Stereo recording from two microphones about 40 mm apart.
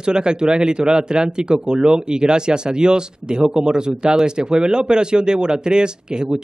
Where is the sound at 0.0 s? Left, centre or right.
Right.